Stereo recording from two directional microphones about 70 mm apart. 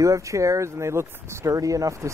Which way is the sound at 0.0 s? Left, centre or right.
Right.